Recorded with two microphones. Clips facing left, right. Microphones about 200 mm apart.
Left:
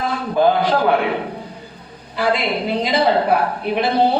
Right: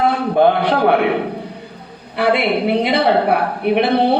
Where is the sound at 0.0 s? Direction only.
60° right (ahead or behind).